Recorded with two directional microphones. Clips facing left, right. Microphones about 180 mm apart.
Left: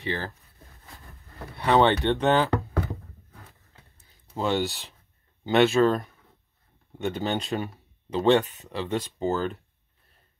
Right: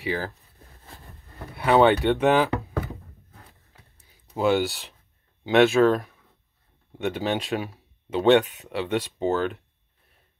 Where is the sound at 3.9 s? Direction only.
5° right (ahead or behind).